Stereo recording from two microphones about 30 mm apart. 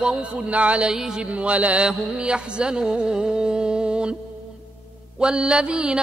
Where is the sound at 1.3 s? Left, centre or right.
Right.